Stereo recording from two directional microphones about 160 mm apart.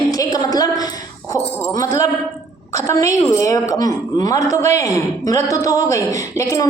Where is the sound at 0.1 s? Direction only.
25° left (ahead or behind).